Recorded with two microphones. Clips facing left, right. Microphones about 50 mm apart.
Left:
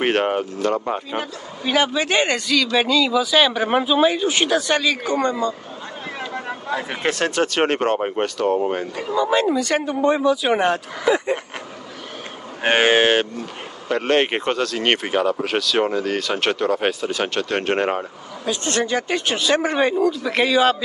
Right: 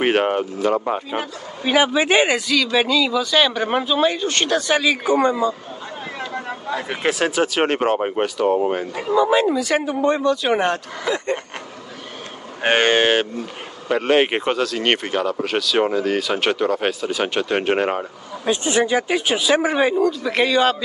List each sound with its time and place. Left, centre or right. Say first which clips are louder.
0.0 s speech: right 1 dB; centre
6.3 s speech: left 1 dB; centre
11.1 s a sound: left 3 dB; centre
12.6 s speech: even; centre
18.4 s speech: right 4 dB; right
18.7 s speech: right 2 dB; centre